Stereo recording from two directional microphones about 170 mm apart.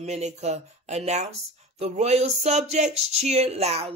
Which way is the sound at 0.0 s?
40° right (ahead or behind).